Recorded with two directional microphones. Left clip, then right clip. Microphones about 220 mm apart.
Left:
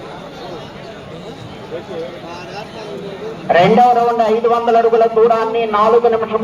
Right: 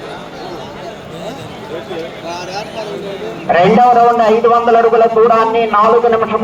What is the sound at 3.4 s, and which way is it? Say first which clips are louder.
A man's voice: right 1 dB; 20° left (ahead or behind).